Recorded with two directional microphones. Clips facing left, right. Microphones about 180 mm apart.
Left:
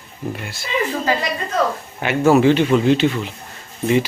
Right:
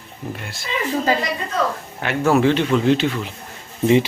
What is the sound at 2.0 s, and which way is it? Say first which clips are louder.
Speech: left 3 dB; 5° left (ahead or behind).